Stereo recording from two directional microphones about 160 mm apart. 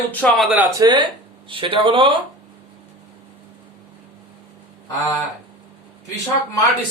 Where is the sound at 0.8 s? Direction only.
25° right (ahead or behind).